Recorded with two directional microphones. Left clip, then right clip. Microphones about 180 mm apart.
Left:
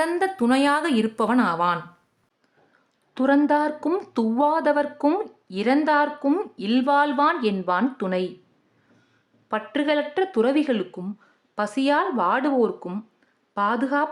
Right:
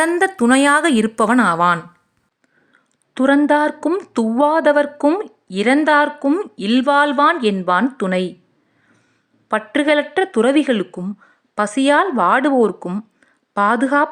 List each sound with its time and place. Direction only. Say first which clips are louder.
0.0 s a woman's voice: right 7 dB; 30° right (ahead or behind)
3.4 s a woman's voice: right 6 dB; 30° right (ahead or behind)
3.8 s a sound: right 5 dB; 10° right (ahead or behind)
4.1 s a woman's voice: right 6 dB; 25° right (ahead or behind)
9.5 s a woman's voice: right 7 dB; 30° right (ahead or behind)